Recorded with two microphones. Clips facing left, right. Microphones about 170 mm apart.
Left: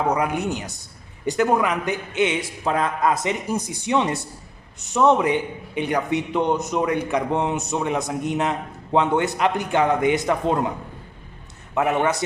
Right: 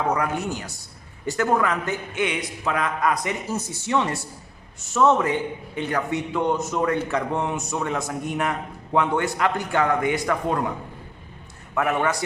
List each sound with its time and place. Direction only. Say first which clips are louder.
0.1 s a man's voice: left 2 dB; 20° left (ahead or behind)
3.5 s a man's voice: left 1 dB; 15° left (ahead or behind)
11.7 s a man's voice: left 2 dB; 20° left (ahead or behind)